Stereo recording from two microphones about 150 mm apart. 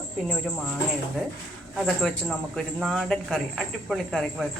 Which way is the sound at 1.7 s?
Centre (ahead or behind).